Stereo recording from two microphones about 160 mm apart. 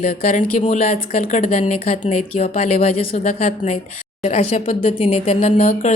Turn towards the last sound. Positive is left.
turn(degrees=45)  # may be behind; listen again after turning